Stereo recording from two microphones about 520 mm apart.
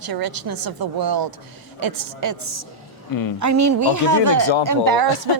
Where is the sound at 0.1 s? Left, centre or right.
Right.